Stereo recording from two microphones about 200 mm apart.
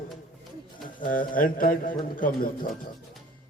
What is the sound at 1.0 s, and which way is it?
Speech, 45° left (ahead or behind).